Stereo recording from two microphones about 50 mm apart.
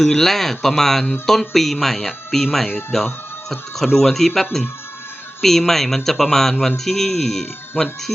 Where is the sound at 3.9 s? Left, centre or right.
Centre.